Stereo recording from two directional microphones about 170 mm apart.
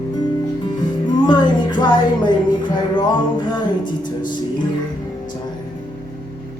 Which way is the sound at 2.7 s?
25° left (ahead or behind).